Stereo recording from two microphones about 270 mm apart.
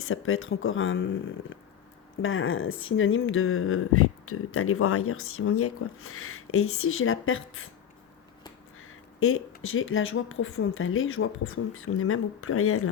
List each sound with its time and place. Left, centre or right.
0.0 s speech: left
8.8 s a sound: left
9.6 s speech: left